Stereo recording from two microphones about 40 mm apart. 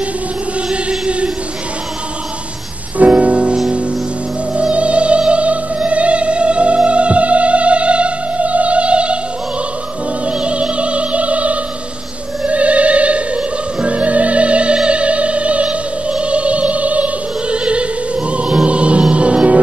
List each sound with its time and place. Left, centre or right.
0.8 s choir: right
3.0 s music: right
4.6 s music: right
10.2 s opera: right